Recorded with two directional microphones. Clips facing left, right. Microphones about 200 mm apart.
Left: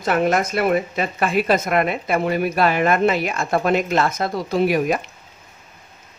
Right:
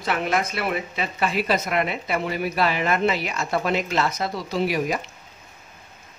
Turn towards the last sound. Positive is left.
turn(degrees=50)  # may be behind; listen again after turning